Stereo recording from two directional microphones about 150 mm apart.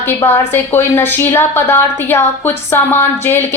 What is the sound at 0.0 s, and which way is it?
A woman's voice, 15° left (ahead or behind).